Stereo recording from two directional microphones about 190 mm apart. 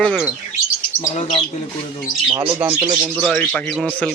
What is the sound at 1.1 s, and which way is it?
Speech, 30° left (ahead or behind).